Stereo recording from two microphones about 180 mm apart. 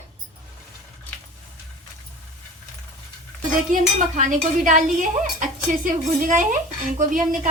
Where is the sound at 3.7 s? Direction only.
45° right (ahead or behind).